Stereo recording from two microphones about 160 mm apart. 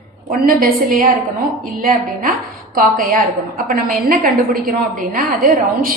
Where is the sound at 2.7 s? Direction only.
60° right (ahead or behind).